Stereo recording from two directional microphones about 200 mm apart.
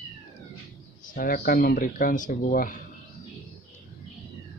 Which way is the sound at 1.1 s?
45° left (ahead or behind).